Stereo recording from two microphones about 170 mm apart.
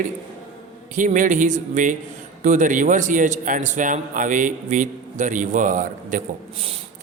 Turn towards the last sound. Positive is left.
turn(degrees=-50)  # may be behind; listen again after turning